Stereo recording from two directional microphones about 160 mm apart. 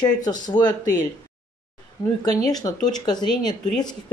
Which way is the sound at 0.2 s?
25° left (ahead or behind).